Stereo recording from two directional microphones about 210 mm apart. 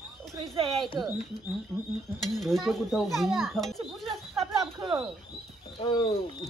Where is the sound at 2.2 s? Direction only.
Centre (ahead or behind).